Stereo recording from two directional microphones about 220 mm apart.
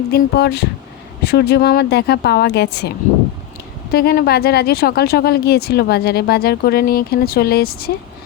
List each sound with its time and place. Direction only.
0.1 s speech: 45° left (ahead or behind)
3.9 s speech: 45° left (ahead or behind)